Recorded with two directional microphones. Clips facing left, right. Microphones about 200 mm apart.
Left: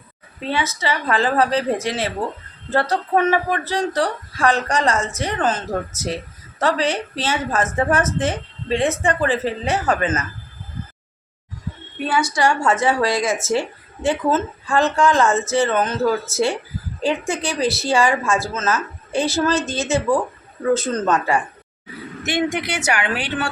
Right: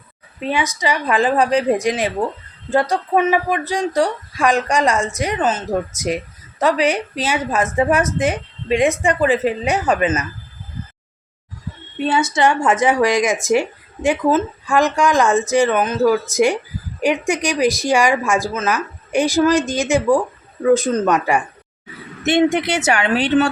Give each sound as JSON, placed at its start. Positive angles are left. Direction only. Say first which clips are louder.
{"t": 0.3, "sound": "a woman's voice", "louder": "right 2 dB", "side_deg": -15}
{"t": 12.0, "sound": "a woman's voice", "louder": "right 3 dB", "side_deg": -25}
{"t": 22.5, "sound": "a woman's voice", "louder": "right 5 dB", "side_deg": -25}